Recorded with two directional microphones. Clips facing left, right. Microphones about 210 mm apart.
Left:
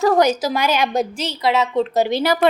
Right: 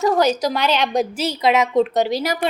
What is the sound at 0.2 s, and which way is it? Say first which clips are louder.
Speech: left 1 dB; 10° left (ahead or behind).